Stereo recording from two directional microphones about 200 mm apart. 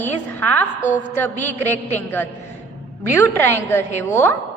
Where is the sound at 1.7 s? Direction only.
10° left (ahead or behind).